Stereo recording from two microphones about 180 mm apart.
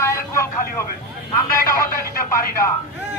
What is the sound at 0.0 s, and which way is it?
Vehicle, 15° left (ahead or behind).